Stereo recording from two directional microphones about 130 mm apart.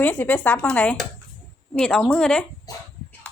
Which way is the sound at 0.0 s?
10° left (ahead or behind).